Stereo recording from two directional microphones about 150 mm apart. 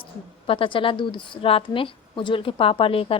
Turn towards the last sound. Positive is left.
turn(degrees=35)  # may be behind; listen again after turning